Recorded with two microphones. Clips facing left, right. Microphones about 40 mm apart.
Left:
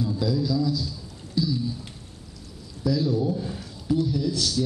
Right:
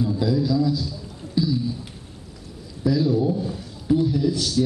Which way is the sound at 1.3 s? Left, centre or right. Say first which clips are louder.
Right 3 dB; centre.